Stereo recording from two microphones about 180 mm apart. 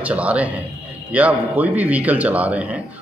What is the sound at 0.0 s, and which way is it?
A man's voice, 5° right (ahead or behind).